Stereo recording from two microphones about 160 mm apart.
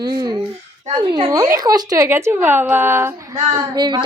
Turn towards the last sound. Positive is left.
turn(degrees=-25)  # may be behind; listen again after turning